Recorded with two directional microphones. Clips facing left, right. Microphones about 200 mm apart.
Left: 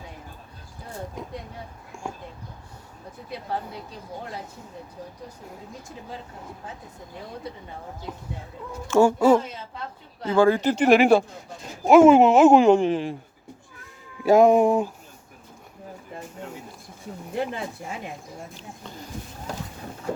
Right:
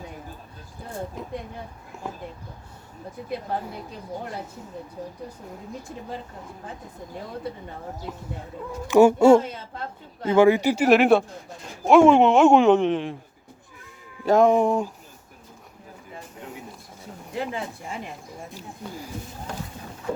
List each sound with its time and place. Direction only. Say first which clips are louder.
8.1 s speech: even; centre (ahead or behind)
8.9 s speech: right 3 dB; 20° right (ahead or behind); by 13.1 s centre (ahead or behind)
14.3 s speech: left 2 dB; 10° left (ahead or behind)
18.5 s speech: right 4 dB; 10° right (ahead or behind)